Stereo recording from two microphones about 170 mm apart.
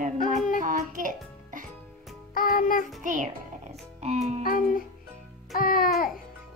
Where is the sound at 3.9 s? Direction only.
40° right (ahead or behind).